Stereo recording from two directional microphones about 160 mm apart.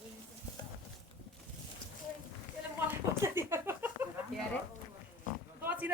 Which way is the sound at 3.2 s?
15° right (ahead or behind).